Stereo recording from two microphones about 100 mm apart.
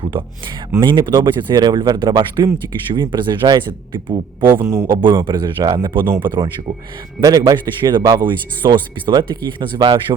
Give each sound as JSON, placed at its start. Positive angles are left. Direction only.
{"t": 0.0, "sound": "a sound", "side_deg": -60}
{"t": 0.8, "sound": "a man's voice", "side_deg": -50}
{"t": 7.2, "sound": "speech", "side_deg": -35}